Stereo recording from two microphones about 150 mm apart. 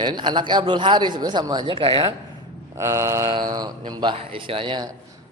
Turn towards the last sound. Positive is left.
turn(degrees=-35)  # may be behind; listen again after turning